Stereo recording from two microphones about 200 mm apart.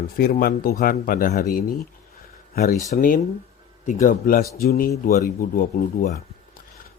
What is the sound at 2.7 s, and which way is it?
Speech, 40° left (ahead or behind).